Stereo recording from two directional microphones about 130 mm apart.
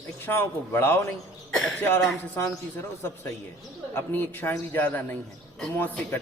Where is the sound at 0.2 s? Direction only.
15° left (ahead or behind).